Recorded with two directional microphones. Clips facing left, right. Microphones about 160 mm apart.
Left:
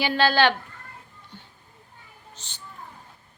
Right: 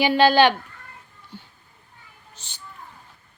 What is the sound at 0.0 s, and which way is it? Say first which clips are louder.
Speech: right 5 dB; 15° right (ahead or behind).